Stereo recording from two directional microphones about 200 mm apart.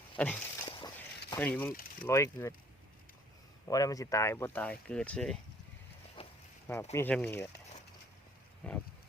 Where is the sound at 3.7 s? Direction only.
15° left (ahead or behind).